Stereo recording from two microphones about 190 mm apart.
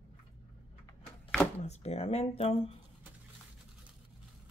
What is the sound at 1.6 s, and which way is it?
Speech, 35° left (ahead or behind).